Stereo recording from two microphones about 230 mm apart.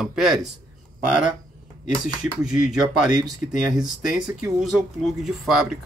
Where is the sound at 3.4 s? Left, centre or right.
Centre.